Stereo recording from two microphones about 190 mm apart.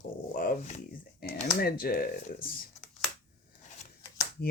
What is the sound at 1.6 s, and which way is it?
Speech, 50° left (ahead or behind).